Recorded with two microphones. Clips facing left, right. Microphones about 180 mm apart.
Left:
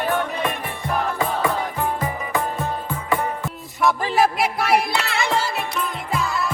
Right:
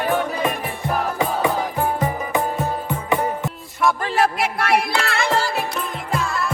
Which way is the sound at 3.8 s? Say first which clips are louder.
Even; centre (ahead or behind).